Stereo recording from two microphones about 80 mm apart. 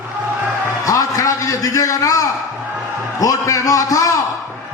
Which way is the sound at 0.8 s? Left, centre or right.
Left.